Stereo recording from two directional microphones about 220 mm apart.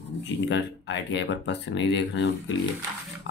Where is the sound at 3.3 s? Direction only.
55° left (ahead or behind).